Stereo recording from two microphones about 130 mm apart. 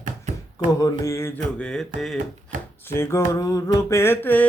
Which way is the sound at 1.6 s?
5° left (ahead or behind).